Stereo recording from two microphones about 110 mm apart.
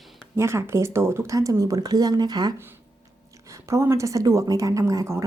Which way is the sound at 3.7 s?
25° right (ahead or behind).